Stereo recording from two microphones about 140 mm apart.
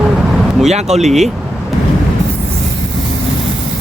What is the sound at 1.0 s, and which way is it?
Speech, centre (ahead or behind).